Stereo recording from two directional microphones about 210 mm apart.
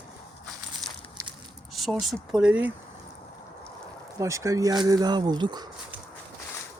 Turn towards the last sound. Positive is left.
turn(degrees=-20)  # may be behind; listen again after turning